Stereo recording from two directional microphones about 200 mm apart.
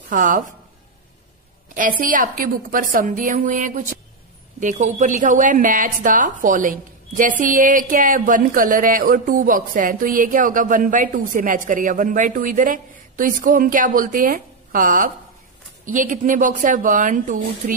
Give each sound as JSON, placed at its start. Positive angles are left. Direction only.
{"t": 0.1, "sound": "a woman's voice", "side_deg": -40}
{"t": 1.8, "sound": "a woman's voice", "side_deg": -40}